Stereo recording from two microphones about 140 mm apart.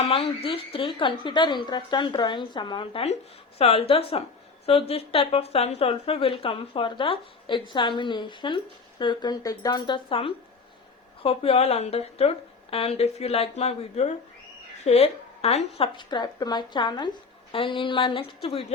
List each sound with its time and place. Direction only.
0.0 s speech: 40° left (ahead or behind)
16.0 s speech: 30° left (ahead or behind)